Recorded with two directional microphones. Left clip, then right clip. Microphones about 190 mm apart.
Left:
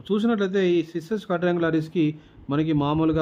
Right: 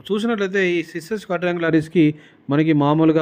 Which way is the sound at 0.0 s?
20° right (ahead or behind).